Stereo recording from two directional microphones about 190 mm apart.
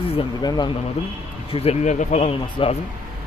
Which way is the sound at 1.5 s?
35° left (ahead or behind).